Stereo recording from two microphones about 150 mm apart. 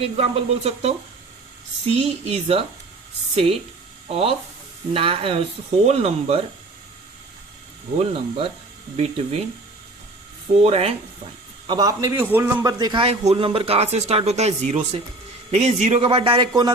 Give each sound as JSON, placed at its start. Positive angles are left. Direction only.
{"t": 0.0, "sound": "a man's voice", "side_deg": -40}
{"t": 4.1, "sound": "a man's voice", "side_deg": -40}
{"t": 7.9, "sound": "a man's voice", "side_deg": -40}
{"t": 10.6, "sound": "speech", "side_deg": -45}
{"t": 11.6, "sound": "a man's voice", "side_deg": -30}
{"t": 12.2, "sound": "a man's voice", "side_deg": -15}
{"t": 12.6, "sound": "a man's voice", "side_deg": -30}
{"t": 13.1, "sound": "a man's voice", "side_deg": -40}